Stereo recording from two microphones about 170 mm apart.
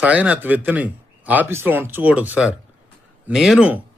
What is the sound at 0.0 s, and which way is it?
A man's voice, 10° right (ahead or behind).